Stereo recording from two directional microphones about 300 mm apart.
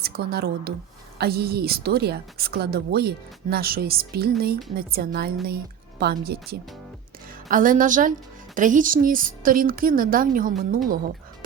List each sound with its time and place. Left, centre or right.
0.0 s a woman's voice: right